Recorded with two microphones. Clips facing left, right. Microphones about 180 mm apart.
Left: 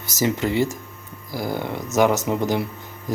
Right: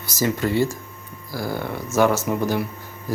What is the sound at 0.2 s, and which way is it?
Speech, 20° left (ahead or behind).